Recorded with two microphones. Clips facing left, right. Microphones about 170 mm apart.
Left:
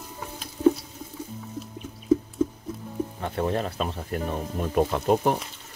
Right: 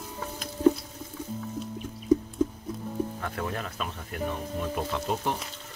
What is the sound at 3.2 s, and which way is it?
Speech, 25° left (ahead or behind).